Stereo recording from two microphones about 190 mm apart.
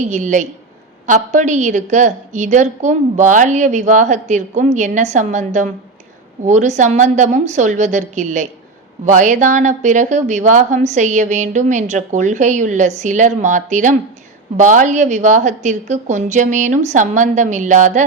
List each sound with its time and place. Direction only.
0.0 s speech: 40° right (ahead or behind)